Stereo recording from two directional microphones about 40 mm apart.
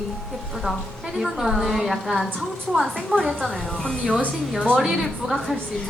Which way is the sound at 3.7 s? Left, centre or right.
Centre.